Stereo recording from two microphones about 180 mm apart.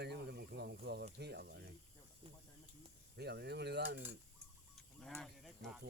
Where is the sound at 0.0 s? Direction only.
65° right (ahead or behind).